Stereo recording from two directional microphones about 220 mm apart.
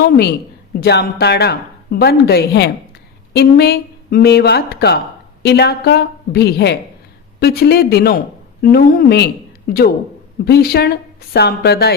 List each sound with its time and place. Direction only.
0.8 s a woman's voice: 50° left (ahead or behind)